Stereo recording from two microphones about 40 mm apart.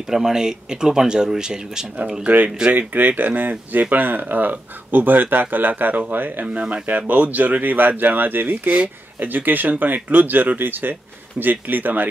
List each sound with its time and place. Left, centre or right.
0.1 s speech: centre
2.2 s speech: right
2.7 s speech: right
6.9 s speech: right
8.6 s speech: right
9.3 s speech: right